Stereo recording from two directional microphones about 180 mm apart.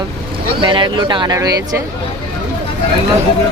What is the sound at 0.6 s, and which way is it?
Speech, 25° right (ahead or behind).